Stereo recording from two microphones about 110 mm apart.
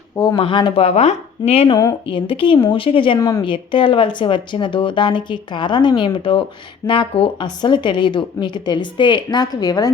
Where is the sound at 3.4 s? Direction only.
50° left (ahead or behind).